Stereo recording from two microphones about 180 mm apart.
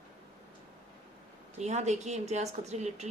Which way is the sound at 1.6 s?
40° right (ahead or behind).